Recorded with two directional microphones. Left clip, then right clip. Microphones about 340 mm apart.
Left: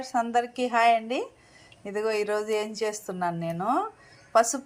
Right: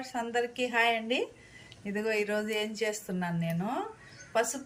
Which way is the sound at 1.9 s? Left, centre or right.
Left.